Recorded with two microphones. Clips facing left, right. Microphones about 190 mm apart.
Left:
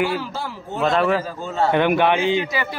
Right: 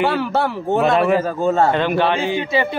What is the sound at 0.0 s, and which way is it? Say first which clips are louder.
Speech: right 5 dB; 65° right (ahead or behind).